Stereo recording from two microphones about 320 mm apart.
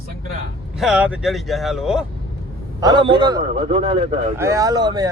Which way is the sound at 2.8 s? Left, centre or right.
Centre.